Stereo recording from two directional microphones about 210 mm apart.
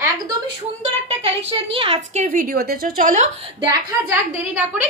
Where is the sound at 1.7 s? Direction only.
30° right (ahead or behind).